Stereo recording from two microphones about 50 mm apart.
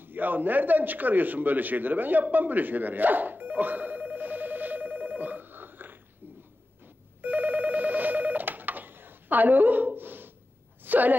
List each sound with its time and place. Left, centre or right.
0.0 s a man's voice: right
7.2 s telephone bell ringing: right
10.8 s a sound: right